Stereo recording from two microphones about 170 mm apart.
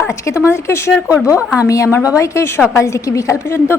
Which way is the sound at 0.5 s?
15° left (ahead or behind).